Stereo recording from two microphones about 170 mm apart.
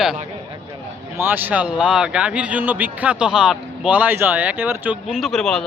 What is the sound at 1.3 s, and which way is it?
A man's voice, 10° right (ahead or behind).